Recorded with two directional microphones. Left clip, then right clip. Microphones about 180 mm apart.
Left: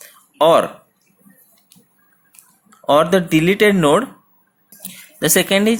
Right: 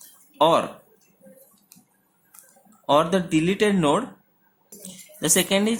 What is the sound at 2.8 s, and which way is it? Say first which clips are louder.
Speech: left 6 dB; 30° left (ahead or behind).